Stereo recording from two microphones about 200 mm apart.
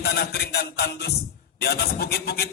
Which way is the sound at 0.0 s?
55° left (ahead or behind).